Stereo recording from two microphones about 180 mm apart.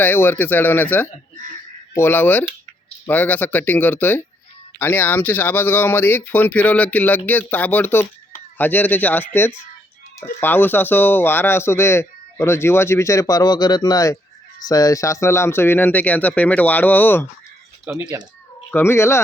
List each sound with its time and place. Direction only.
0.0 s speech: 10° left (ahead or behind)
17.9 s speech: 10° right (ahead or behind)
18.7 s speech: 15° left (ahead or behind)